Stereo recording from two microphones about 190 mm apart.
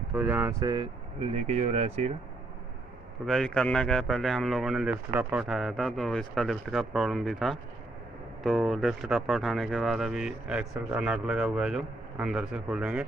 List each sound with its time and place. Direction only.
0.1 s speech: 10° right (ahead or behind); by 2.1 s 35° right (ahead or behind)
3.3 s speech: 5° left (ahead or behind)